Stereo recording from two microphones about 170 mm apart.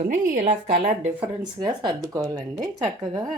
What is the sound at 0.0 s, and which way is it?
Speech, 50° right (ahead or behind).